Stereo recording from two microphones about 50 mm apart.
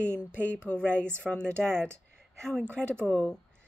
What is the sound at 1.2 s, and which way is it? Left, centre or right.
Speech, centre.